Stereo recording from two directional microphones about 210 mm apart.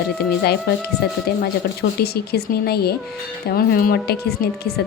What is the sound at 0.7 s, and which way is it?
Speech, 50° left (ahead or behind).